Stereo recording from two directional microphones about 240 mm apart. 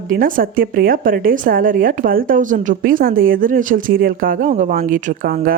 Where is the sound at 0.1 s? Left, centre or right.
Right.